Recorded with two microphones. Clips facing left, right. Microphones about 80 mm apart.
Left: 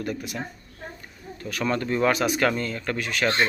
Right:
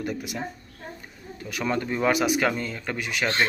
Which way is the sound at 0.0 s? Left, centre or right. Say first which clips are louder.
Even; centre.